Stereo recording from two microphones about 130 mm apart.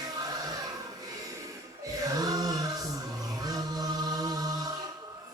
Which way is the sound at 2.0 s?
30° right (ahead or behind).